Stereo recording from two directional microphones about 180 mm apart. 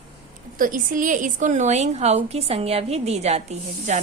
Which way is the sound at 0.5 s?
50° right (ahead or behind).